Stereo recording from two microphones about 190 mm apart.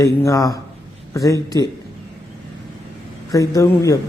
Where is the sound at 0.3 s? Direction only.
15° left (ahead or behind).